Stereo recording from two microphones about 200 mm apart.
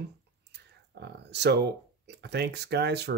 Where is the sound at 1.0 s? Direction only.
55° right (ahead or behind).